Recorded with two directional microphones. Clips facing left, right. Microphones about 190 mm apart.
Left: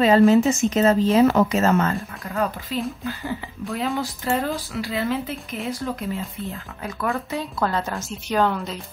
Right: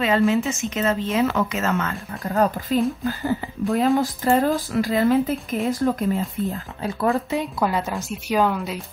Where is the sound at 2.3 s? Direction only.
45° right (ahead or behind).